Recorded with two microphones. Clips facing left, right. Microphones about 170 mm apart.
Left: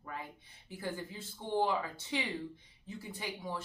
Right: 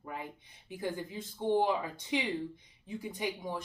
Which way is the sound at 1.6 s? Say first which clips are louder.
Right 2 dB; 15° right (ahead or behind).